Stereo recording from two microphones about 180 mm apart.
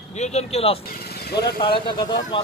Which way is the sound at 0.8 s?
55° left (ahead or behind).